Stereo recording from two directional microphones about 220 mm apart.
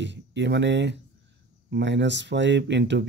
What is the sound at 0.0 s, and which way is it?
Speech, 55° right (ahead or behind).